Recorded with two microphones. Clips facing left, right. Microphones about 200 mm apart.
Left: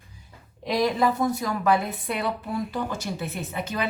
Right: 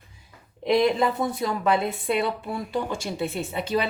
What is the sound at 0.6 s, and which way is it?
A woman's voice, 25° right (ahead or behind).